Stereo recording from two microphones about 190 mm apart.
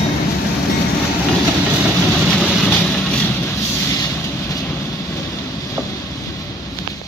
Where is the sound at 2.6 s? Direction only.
5° left (ahead or behind).